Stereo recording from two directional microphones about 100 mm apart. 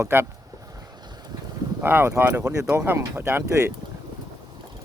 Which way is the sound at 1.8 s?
20° right (ahead or behind).